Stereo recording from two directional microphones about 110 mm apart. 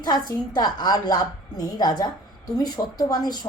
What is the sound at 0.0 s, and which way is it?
Speech, 35° left (ahead or behind).